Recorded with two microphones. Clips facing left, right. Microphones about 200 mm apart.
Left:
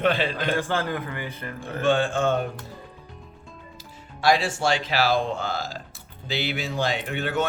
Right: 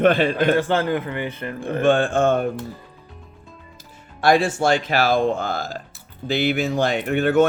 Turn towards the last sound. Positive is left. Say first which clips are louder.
# right 9 dB
turn(degrees=-50)  # may be behind; listen again after turning